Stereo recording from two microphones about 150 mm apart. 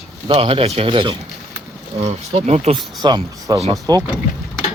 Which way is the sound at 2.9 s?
30° right (ahead or behind).